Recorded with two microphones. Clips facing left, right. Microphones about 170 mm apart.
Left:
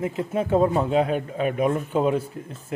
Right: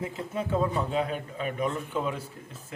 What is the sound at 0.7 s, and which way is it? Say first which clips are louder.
A man's voice: left 7 dB; 55° left (ahead or behind).